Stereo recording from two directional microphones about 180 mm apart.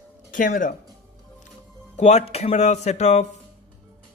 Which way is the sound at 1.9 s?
40° left (ahead or behind).